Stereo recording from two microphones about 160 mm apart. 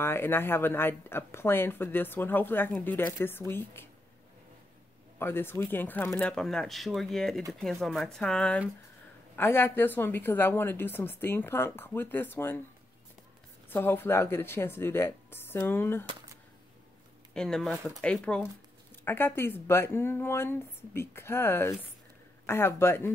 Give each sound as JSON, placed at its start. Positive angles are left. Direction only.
{"t": 0.0, "sound": "a woman's voice", "side_deg": 15}
{"t": 5.2, "sound": "a woman's voice", "side_deg": 15}
{"t": 13.7, "sound": "a woman's voice", "side_deg": 15}
{"t": 17.3, "sound": "a woman's voice", "side_deg": 5}